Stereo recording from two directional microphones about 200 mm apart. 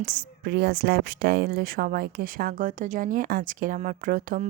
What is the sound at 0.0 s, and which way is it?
Speech, 45° right (ahead or behind).